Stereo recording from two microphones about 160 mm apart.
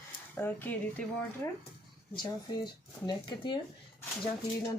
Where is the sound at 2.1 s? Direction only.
25° left (ahead or behind).